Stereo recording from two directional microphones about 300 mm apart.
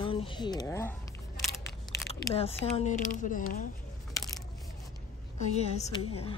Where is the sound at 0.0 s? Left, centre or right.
Centre.